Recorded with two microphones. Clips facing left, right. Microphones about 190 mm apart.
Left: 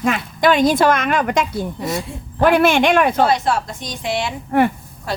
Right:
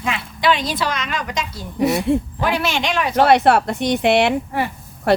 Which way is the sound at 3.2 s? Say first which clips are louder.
Right 4 dB; 65° right (ahead or behind).